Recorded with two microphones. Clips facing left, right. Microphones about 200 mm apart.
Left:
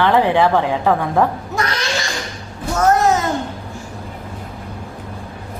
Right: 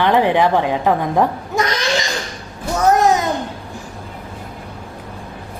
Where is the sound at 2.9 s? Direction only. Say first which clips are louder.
Right 1 dB; 15° right (ahead or behind).